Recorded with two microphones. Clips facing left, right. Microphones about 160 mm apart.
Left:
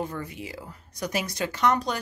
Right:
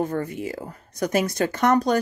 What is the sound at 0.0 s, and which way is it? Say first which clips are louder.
Speech: right 7 dB; 45° right (ahead or behind).